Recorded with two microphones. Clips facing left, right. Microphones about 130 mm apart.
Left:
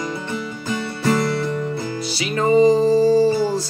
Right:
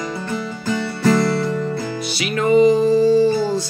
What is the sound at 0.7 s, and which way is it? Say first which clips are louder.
Music: right 3 dB; 20° left (ahead or behind).